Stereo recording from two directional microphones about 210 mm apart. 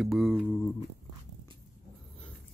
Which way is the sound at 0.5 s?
15° left (ahead or behind).